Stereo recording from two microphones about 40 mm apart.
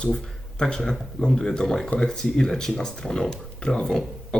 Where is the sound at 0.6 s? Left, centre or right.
Centre.